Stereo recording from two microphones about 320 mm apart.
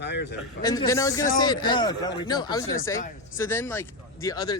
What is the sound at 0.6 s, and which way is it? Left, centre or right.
Speech, centre.